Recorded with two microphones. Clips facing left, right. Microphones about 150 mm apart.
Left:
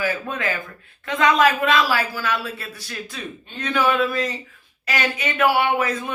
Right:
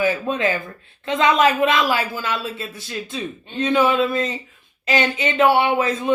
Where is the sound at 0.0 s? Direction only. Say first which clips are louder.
Right 5 dB; 20° right (ahead or behind).